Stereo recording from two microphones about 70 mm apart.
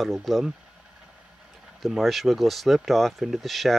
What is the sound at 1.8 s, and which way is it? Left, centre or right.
Speech, centre.